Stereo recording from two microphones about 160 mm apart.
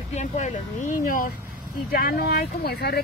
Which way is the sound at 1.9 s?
70° left (ahead or behind).